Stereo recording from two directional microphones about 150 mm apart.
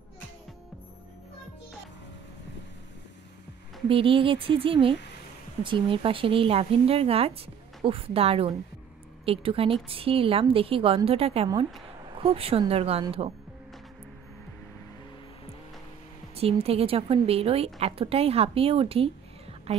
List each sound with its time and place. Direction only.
3.9 s speech: 35° right (ahead or behind)
16.3 s a woman's voice: 40° right (ahead or behind)